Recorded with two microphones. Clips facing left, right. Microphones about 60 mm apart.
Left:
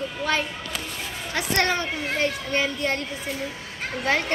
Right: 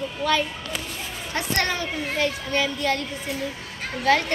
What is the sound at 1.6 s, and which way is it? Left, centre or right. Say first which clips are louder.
A child's voice: left 3 dB; left.